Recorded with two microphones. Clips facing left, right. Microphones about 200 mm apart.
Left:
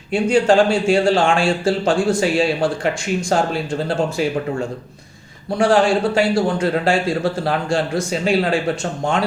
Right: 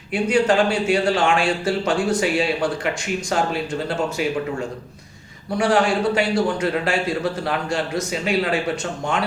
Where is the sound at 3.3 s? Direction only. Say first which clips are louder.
Left 4 dB; 35° left (ahead or behind).